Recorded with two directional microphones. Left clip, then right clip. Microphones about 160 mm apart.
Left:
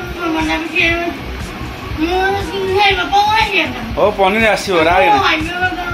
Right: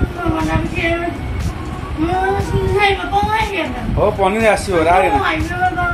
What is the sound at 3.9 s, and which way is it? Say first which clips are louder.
Speech: left 3 dB; centre (ahead or behind).